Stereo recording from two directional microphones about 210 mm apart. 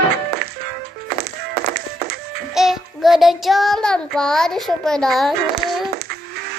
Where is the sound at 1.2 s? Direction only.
50° right (ahead or behind).